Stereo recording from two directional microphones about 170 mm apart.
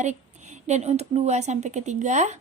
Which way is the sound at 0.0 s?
45° right (ahead or behind).